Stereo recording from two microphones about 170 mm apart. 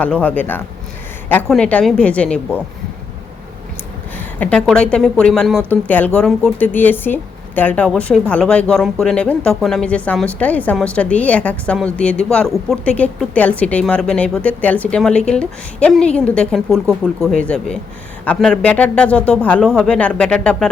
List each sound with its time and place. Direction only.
0.0 s speech: 10° left (ahead or behind)
4.2 s a woman's voice: 10° left (ahead or behind)
16.8 s speech: 15° right (ahead or behind)
17.3 s speech: 5° left (ahead or behind)